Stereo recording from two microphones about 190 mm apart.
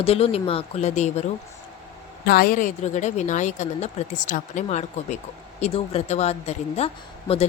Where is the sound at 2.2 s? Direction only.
50° left (ahead or behind).